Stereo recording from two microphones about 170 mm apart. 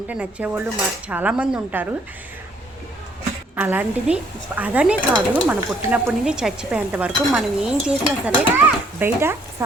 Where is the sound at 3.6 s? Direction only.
10° right (ahead or behind).